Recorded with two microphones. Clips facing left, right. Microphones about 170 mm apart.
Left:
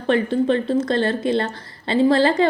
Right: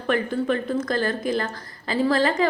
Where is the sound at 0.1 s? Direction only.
25° left (ahead or behind).